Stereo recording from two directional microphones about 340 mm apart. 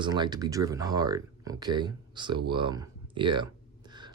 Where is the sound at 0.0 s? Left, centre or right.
Centre.